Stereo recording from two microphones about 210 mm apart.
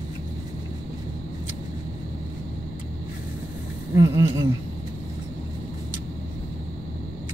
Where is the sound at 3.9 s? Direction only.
15° right (ahead or behind).